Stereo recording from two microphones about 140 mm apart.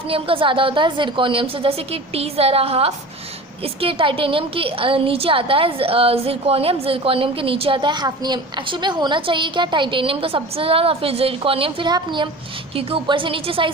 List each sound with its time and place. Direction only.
0.1 s a woman's voice: 40° right (ahead or behind)